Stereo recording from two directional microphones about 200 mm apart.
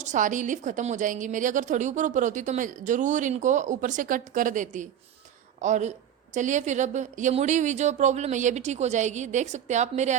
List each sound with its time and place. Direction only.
0.0 s a woman's voice: 40° right (ahead or behind)